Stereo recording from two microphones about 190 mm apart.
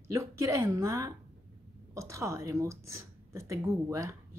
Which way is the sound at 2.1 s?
15° right (ahead or behind).